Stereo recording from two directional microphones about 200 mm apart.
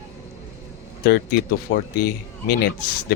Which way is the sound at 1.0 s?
50° left (ahead or behind).